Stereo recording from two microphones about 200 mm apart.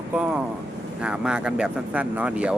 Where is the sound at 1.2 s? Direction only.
5° right (ahead or behind).